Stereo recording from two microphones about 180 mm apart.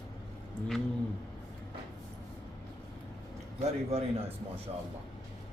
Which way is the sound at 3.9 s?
35° right (ahead or behind).